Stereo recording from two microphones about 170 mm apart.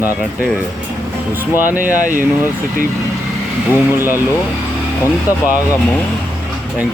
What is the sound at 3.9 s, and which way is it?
Speech, 10° right (ahead or behind).